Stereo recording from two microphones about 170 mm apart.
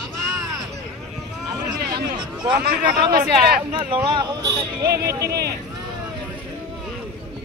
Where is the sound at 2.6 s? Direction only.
65° right (ahead or behind).